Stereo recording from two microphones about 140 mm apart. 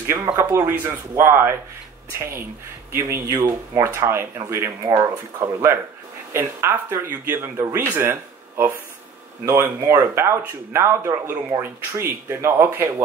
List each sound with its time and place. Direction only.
0.1 s speech: 20° right (ahead or behind)